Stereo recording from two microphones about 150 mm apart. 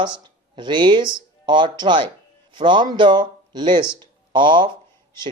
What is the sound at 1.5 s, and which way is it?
Speech, 30° right (ahead or behind).